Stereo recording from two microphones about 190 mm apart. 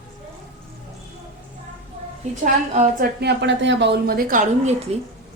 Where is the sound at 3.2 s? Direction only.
70° right (ahead or behind); by 4.7 s 45° right (ahead or behind).